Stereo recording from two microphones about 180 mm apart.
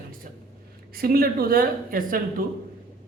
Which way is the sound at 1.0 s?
55° right (ahead or behind).